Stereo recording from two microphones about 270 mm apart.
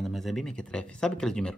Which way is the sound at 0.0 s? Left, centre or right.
Centre.